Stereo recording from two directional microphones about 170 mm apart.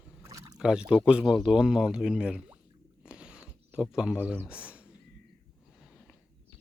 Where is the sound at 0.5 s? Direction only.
5° right (ahead or behind).